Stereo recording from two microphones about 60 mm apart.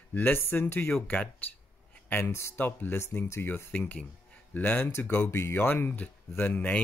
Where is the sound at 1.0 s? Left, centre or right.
Left.